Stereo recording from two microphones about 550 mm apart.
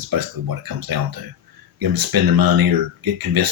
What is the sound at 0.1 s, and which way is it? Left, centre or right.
Speech, right.